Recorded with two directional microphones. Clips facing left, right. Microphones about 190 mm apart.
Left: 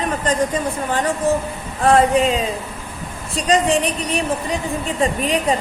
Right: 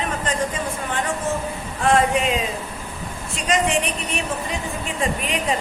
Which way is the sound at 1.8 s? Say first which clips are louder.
Left 4 dB; 35° left (ahead or behind).